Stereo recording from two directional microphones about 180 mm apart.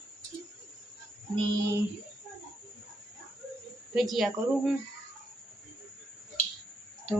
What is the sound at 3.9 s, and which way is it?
Speech, centre (ahead or behind).